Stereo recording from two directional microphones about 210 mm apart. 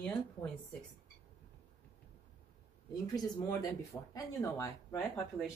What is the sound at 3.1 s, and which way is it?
Speech, 15° left (ahead or behind).